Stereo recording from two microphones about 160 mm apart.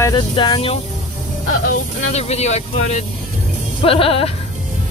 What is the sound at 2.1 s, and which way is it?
Speech, 40° left (ahead or behind).